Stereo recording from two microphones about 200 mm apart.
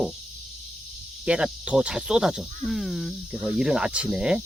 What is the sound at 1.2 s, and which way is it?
Speech, 5° right (ahead or behind).